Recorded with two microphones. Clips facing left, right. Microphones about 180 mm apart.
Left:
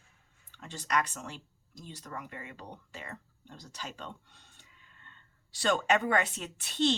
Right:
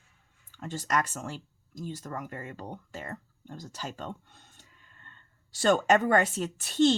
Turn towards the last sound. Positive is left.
turn(degrees=-45)  # may be behind; listen again after turning